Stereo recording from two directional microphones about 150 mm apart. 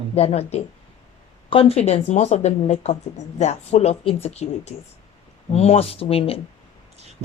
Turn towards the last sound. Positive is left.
turn(degrees=40)  # may be behind; listen again after turning